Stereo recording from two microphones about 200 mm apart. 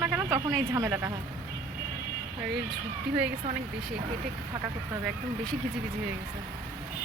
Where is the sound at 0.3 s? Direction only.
15° right (ahead or behind).